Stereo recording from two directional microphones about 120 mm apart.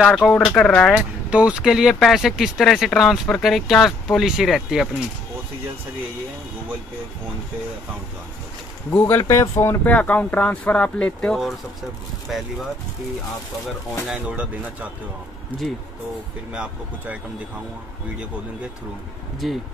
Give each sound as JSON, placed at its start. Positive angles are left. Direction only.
{"t": 0.0, "sound": "speech", "side_deg": 5}
{"t": 0.9, "sound": "speech", "side_deg": -10}
{"t": 8.9, "sound": "speech", "side_deg": 15}
{"t": 14.0, "sound": "speech", "side_deg": -10}
{"t": 16.5, "sound": "speech", "side_deg": -10}
{"t": 19.4, "sound": "speech", "side_deg": 0}